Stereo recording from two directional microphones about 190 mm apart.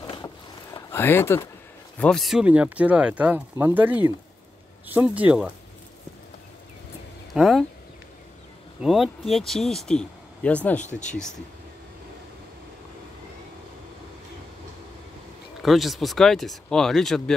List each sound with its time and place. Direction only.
0.0 s a sound: 25° left (ahead or behind)
0.7 s speech: 10° left (ahead or behind); by 5.5 s 10° right (ahead or behind)
7.3 s speech: centre (ahead or behind)
8.8 s speech: centre (ahead or behind)
15.6 s speech: centre (ahead or behind)